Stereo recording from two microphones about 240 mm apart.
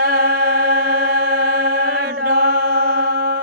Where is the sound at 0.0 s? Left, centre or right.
Right.